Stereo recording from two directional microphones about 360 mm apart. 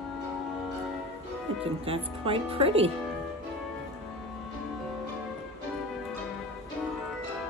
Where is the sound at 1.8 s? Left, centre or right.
Centre.